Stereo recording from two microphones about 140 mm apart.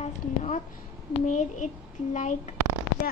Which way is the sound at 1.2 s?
60° left (ahead or behind).